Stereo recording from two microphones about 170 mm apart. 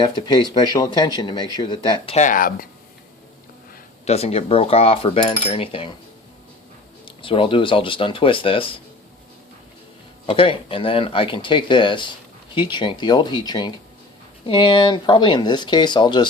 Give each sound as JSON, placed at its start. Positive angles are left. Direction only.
{"t": 0.0, "sound": "speech", "side_deg": 25}
{"t": 2.2, "sound": "speech", "side_deg": 55}
{"t": 4.0, "sound": "cutlery", "side_deg": 40}
{"t": 7.0, "sound": "cutlery", "side_deg": 30}
{"t": 10.2, "sound": "cutlery", "side_deg": 30}
{"t": 12.5, "sound": "speech", "side_deg": 25}